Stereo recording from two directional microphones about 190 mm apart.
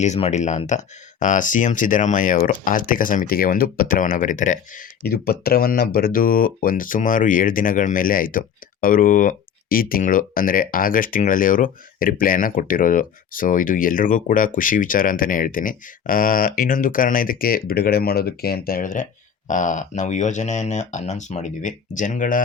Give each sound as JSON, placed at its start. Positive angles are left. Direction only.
{"t": 0.0, "sound": "speech", "side_deg": 35}